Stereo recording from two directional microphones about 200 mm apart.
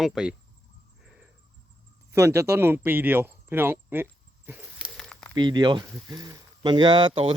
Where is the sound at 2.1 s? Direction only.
15° right (ahead or behind).